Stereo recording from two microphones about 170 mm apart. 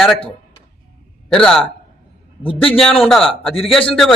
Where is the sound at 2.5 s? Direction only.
35° left (ahead or behind).